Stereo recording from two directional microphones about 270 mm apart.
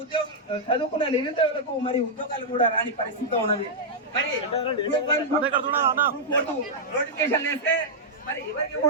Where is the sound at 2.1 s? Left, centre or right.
Left.